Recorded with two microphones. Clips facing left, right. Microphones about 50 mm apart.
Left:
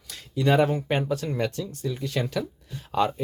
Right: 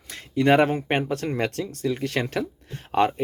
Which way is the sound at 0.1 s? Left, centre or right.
Right.